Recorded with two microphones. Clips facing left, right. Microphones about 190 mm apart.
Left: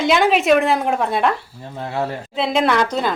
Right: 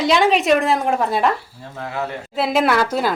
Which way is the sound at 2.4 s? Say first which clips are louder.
Even; 5° right (ahead or behind).